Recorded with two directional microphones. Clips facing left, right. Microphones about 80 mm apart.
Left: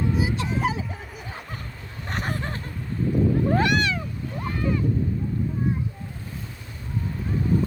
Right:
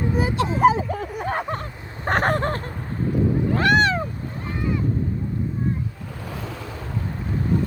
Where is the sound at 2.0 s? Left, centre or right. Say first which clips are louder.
Right 10 dB; right.